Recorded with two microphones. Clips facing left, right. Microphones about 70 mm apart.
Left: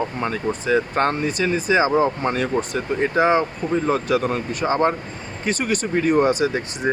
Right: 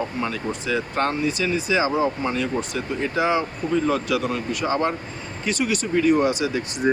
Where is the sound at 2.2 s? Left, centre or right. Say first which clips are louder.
Left 3 dB; left.